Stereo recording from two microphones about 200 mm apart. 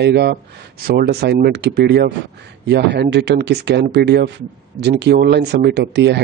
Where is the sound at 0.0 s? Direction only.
55° right (ahead or behind).